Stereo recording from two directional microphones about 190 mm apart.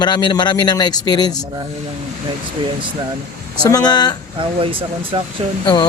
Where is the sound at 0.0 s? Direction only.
25° left (ahead or behind).